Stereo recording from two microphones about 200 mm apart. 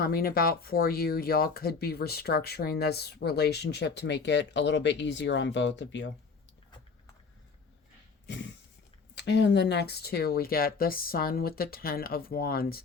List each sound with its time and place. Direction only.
0.0 s speech: 50° left (ahead or behind); by 6.1 s 65° left (ahead or behind)
9.1 s speech: 60° left (ahead or behind)